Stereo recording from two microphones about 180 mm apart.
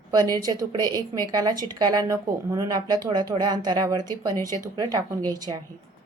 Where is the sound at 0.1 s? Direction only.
20° right (ahead or behind).